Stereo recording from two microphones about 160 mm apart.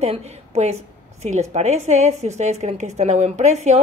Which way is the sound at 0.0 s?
45° right (ahead or behind).